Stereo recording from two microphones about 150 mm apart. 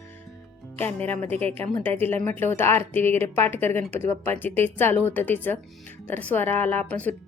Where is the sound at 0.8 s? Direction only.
10° left (ahead or behind).